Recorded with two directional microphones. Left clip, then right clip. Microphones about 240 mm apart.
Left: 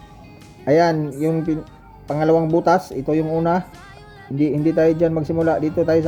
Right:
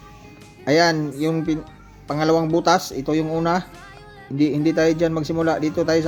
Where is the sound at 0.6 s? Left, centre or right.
Centre.